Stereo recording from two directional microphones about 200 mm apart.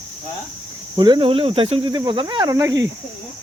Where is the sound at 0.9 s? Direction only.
20° right (ahead or behind).